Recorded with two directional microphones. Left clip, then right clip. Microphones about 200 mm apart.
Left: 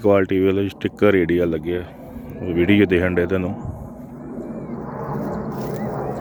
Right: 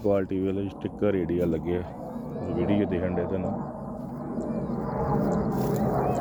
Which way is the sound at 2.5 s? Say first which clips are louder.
Left 10 dB; 30° left (ahead or behind).